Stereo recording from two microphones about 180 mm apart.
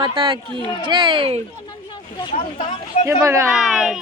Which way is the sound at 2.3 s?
45° left (ahead or behind).